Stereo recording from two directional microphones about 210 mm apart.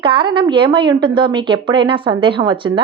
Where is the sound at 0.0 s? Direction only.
25° right (ahead or behind).